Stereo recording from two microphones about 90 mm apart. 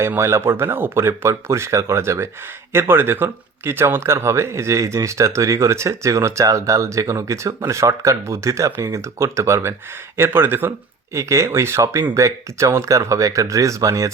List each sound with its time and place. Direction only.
0.2 s speech: 30° right (ahead or behind)